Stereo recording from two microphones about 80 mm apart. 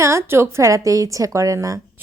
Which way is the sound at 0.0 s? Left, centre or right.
Right.